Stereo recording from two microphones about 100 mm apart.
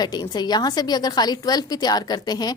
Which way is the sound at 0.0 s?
45° left (ahead or behind).